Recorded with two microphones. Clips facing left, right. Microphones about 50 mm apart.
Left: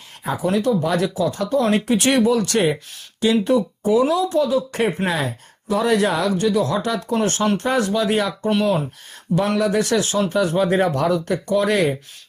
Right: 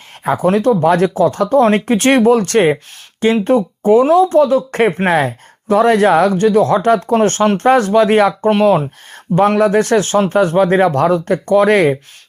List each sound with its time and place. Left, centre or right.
0.3 s speech: right